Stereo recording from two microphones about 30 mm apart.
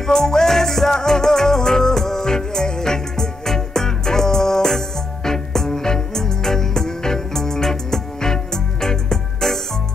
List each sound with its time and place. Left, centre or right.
0.0 s music: centre